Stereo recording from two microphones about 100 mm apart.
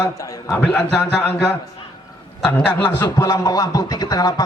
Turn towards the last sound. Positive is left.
turn(degrees=40)  # may be behind; listen again after turning